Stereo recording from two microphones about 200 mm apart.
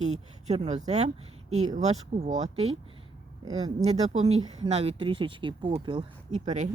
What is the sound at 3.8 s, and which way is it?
Speech, 35° right (ahead or behind).